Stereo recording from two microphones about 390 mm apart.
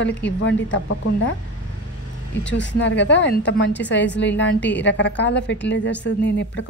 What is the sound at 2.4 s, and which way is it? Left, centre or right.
A woman's voice, left.